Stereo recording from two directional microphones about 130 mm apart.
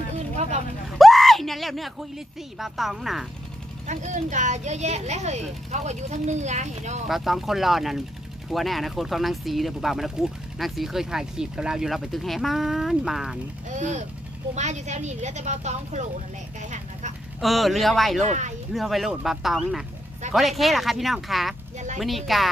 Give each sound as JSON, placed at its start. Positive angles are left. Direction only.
{"t": 0.1, "sound": "vehicle", "side_deg": -60}
{"t": 0.9, "sound": "a sound", "side_deg": 0}
{"t": 2.6, "sound": "speech", "side_deg": 0}
{"t": 3.8, "sound": "speech", "side_deg": -75}
{"t": 7.1, "sound": "speech", "side_deg": 0}
{"t": 13.7, "sound": "speech", "side_deg": -65}
{"t": 17.4, "sound": "speech", "side_deg": 0}